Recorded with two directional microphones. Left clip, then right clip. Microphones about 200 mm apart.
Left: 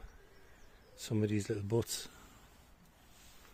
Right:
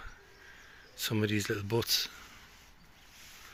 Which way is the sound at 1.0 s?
5° left (ahead or behind).